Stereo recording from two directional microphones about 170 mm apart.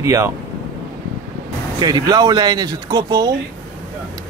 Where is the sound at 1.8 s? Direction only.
25° right (ahead or behind).